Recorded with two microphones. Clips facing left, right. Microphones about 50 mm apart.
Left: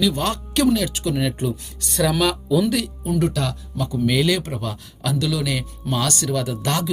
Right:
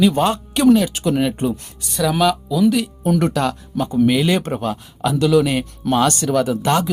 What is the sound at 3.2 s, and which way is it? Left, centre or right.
Speech, right.